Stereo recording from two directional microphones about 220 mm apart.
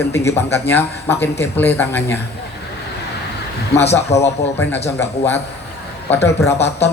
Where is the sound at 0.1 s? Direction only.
10° left (ahead or behind).